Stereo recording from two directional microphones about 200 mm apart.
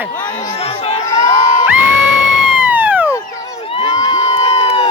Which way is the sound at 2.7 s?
10° right (ahead or behind).